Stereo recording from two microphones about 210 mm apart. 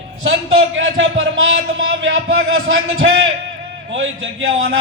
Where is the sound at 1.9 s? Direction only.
65° right (ahead or behind).